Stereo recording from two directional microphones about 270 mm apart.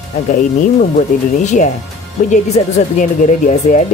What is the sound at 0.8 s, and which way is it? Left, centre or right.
Speech, left.